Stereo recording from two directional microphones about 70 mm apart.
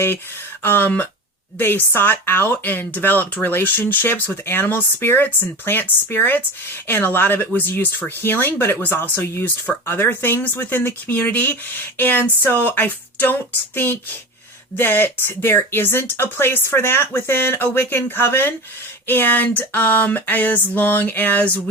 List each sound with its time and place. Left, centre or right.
0.6 s speech: left